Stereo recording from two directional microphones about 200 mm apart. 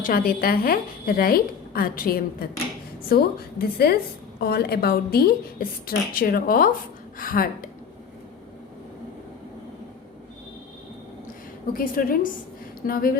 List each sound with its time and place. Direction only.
0.0 s a woman's voice: 45° left (ahead or behind)
11.7 s a woman's voice: 45° left (ahead or behind)